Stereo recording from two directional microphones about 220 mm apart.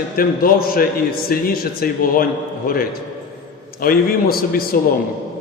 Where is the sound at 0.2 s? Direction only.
40° left (ahead or behind).